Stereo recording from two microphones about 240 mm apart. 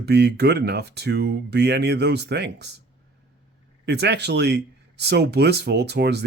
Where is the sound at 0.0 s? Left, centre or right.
Right.